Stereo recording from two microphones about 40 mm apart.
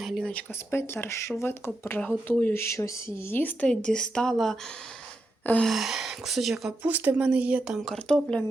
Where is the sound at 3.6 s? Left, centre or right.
Centre.